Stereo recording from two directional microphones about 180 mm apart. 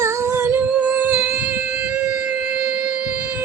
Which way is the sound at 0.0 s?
15° right (ahead or behind).